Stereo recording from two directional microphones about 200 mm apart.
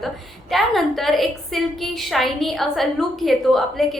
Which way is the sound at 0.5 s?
Centre (ahead or behind).